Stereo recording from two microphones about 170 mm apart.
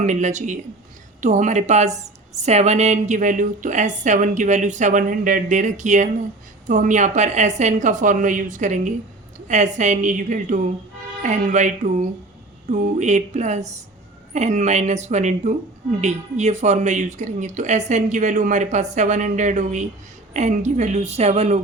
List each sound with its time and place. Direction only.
0.0 s a woman's voice: 45° right (ahead or behind)